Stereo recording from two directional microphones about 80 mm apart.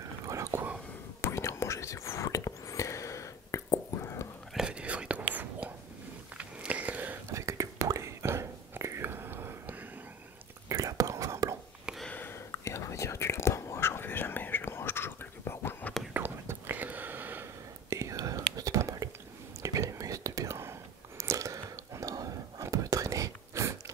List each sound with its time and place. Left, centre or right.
0.2 s whispering: right
1.2 s whispering: left
4.6 s whispering: centre
6.3 s a sound: centre
7.2 s whispering: right
10.7 s whispering: right
12.1 s a sound: left
12.4 s whispering: left
16.1 s whispering: right
17.8 s whispering: right